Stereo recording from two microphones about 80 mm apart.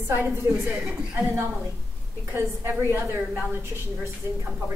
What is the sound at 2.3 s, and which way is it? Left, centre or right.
A woman's voice, right.